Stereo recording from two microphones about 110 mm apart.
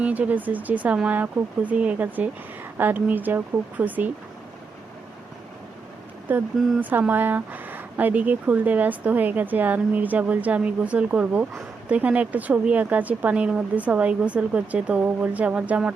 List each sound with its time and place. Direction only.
0.0 s a woman's voice: 15° right (ahead or behind)
6.3 s a woman's voice: 15° right (ahead or behind)